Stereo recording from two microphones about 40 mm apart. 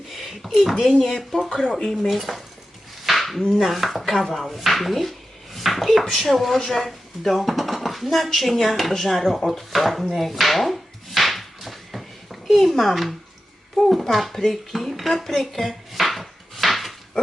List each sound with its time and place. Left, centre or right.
0.1 s a sound: centre
0.9 s speech: centre
1.8 s chopping: centre
3.1 s a sound: centre
3.6 s chopping: centre
6.7 s speech: centre
12.6 s chopping: centre